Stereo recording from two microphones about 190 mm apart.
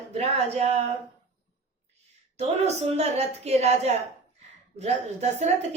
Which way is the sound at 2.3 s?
35° right (ahead or behind).